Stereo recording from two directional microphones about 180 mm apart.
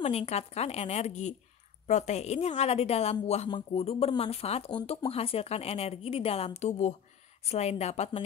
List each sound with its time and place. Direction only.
0.0 s a woman's voice: 35° left (ahead or behind)